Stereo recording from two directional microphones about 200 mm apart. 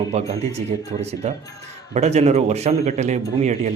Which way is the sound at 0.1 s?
30° right (ahead or behind).